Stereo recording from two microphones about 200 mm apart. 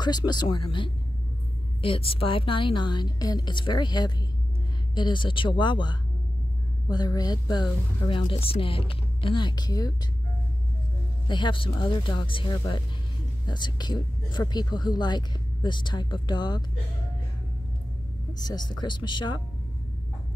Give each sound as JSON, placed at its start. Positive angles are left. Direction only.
{"t": 0.0, "sound": "speech", "side_deg": 20}
{"t": 11.2, "sound": "speech", "side_deg": 25}
{"t": 18.3, "sound": "speech", "side_deg": 20}